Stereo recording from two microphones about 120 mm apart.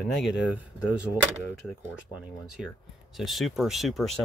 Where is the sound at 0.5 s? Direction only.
10° right (ahead or behind).